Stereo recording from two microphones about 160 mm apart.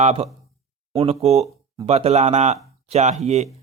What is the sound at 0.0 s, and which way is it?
Speech, 45° right (ahead or behind).